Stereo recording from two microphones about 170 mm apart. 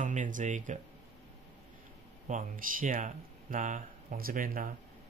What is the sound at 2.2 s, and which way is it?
Speech, 50° right (ahead or behind).